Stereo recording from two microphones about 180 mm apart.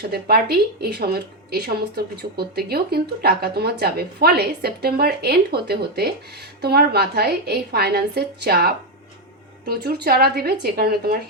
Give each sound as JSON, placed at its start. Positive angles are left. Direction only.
{"t": 0.1, "sound": "speech", "side_deg": -60}